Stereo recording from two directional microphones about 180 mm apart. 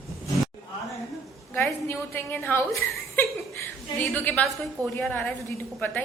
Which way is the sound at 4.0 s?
10° left (ahead or behind).